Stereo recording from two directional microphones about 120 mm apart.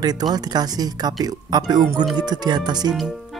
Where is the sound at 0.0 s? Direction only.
35° right (ahead or behind).